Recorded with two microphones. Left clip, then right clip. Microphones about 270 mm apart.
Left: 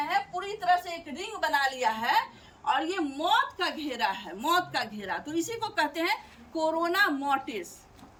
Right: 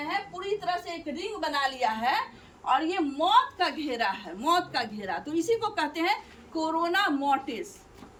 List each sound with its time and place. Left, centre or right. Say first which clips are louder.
0.3 s a woman's voice: left 4 dB; centre